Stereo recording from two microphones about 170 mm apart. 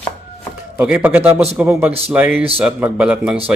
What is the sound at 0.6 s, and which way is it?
A man's voice, 10° right (ahead or behind).